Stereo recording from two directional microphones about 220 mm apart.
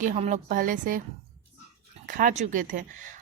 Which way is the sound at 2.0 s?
35° right (ahead or behind).